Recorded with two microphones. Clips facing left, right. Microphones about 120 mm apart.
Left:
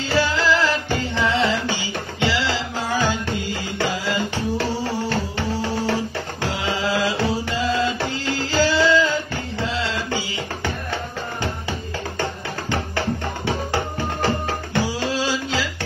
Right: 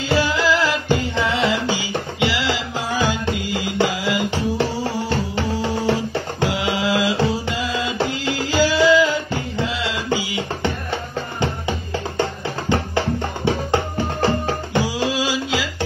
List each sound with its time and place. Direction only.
0.1 s music: 15° right (ahead or behind)
12.2 s music: 20° right (ahead or behind)
14.2 s music: 15° right (ahead or behind)